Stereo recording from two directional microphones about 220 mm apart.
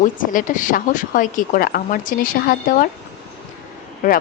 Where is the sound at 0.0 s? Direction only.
35° left (ahead or behind).